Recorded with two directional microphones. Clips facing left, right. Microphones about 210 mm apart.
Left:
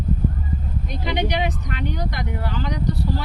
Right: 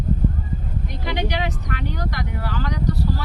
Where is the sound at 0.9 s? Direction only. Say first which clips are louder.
Left 2 dB; 20° left (ahead or behind).